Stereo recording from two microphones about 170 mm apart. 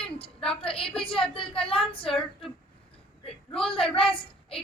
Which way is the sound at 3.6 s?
30° left (ahead or behind).